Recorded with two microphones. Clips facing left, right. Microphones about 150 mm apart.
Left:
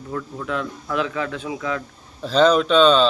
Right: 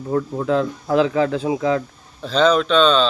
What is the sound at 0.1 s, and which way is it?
Speech, 35° right (ahead or behind).